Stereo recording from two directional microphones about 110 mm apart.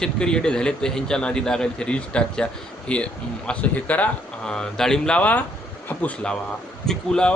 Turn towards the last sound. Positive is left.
turn(degrees=5)  # may be behind; listen again after turning